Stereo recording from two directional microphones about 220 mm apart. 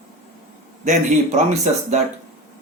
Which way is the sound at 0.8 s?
30° right (ahead or behind).